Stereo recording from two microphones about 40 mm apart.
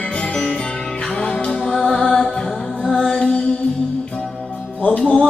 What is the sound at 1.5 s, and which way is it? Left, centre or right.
Music, centre.